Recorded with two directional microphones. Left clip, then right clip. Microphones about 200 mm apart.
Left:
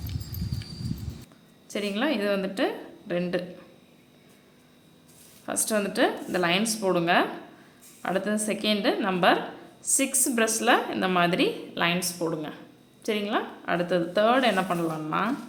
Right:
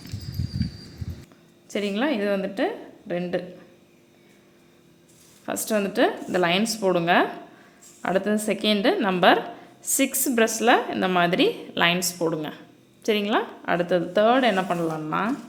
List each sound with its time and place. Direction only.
1.6 s a woman's voice: 20° right (ahead or behind)
5.5 s a woman's voice: 20° right (ahead or behind)